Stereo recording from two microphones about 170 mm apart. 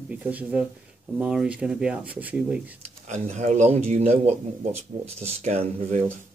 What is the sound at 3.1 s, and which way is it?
Speech, 45° right (ahead or behind).